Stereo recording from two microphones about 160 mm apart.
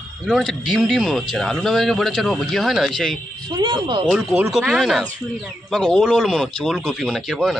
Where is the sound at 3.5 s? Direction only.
30° right (ahead or behind).